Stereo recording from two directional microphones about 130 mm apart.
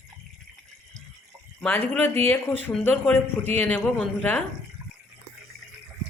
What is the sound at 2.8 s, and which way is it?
A man's voice, 15° left (ahead or behind).